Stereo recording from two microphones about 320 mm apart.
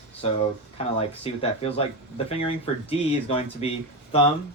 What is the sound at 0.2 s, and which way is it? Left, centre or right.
Speech, centre.